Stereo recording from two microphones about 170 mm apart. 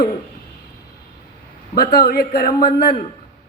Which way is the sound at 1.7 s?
70° left (ahead or behind).